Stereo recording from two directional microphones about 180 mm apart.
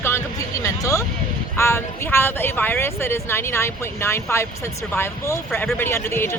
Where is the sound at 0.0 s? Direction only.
15° left (ahead or behind).